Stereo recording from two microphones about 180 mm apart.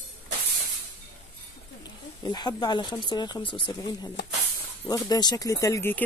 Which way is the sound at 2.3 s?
25° left (ahead or behind).